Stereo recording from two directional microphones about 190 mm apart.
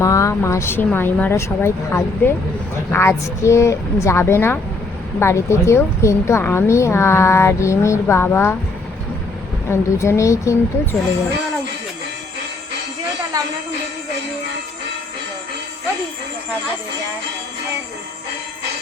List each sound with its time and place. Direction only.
0.0 s a woman's voice: 15° left (ahead or behind)
9.6 s a woman's voice: 15° left (ahead or behind)
13.3 s speech: 20° right (ahead or behind)